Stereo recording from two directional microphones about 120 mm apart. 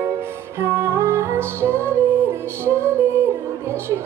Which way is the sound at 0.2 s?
20° right (ahead or behind).